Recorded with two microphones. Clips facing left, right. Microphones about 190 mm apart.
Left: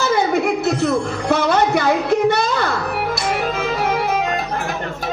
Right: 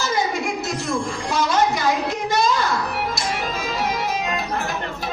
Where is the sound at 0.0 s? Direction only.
60° left (ahead or behind).